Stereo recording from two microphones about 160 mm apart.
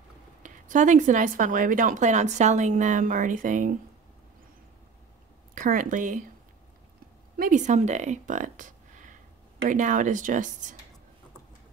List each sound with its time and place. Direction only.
0.4 s speech: 50° right (ahead or behind)
5.5 s speech: 60° right (ahead or behind)
7.3 s speech: 55° right (ahead or behind)